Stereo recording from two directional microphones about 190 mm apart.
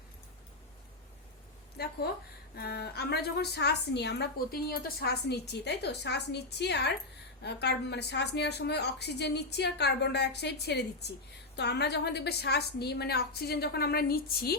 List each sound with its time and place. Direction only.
1.8 s a woman's voice: 55° left (ahead or behind)